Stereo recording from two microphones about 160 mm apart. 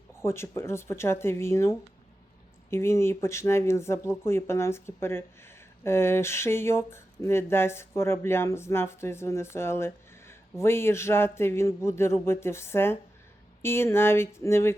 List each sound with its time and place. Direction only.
0.2 s speech: 15° left (ahead or behind)